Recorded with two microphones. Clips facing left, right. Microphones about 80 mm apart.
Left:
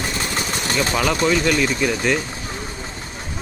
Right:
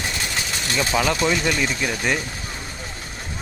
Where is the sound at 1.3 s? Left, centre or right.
Centre.